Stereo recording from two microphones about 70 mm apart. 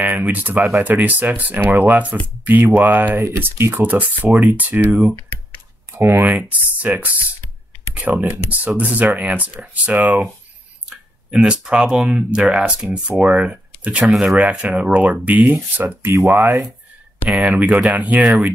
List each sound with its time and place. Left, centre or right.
0.0 s speech: right
3.8 s speech: right
5.9 s speech: right
6.2 s speech: right
10.9 s speech: centre; by 16.2 s right
16.3 s speech: right
17.4 s speech: centre